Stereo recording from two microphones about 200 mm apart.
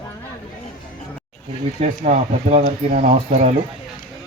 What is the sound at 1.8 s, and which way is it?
Speech, 35° right (ahead or behind).